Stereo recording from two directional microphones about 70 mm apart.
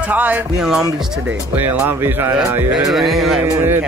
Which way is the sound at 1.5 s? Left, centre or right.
Right.